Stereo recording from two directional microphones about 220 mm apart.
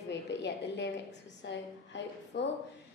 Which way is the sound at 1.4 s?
55° left (ahead or behind).